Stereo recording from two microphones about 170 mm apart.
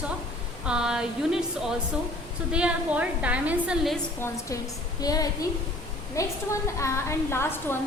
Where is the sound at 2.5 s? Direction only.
5° right (ahead or behind).